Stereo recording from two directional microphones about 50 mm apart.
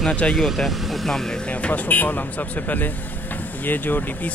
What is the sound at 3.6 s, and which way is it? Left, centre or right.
Speech, left.